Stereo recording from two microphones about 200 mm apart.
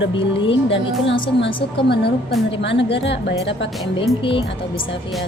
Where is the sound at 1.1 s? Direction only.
60° left (ahead or behind).